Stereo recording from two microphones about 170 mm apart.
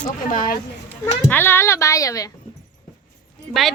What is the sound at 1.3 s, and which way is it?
Speech, 10° left (ahead or behind).